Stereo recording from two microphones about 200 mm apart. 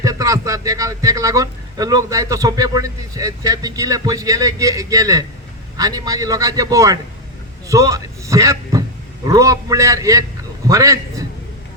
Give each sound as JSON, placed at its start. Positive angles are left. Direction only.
{"t": 0.0, "sound": "a man's voice", "side_deg": -15}